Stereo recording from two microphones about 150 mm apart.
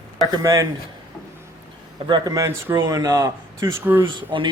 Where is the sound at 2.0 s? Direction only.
30° right (ahead or behind).